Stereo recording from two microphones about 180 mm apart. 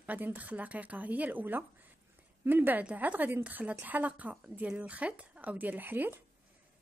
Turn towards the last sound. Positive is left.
turn(degrees=-10)  # may be behind; listen again after turning